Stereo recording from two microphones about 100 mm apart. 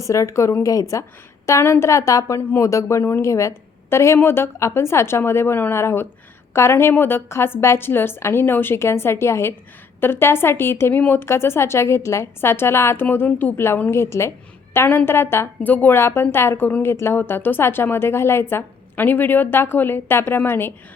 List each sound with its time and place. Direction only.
0.0 s speech: 30° left (ahead or behind)